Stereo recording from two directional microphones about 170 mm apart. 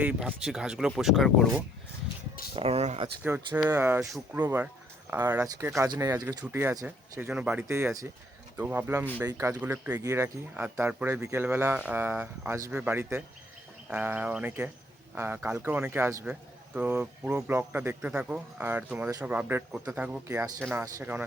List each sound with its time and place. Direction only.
0.0 s speech: 5° right (ahead or behind)
2.6 s speech: 35° right (ahead or behind)
3.2 s speech: 10° right (ahead or behind)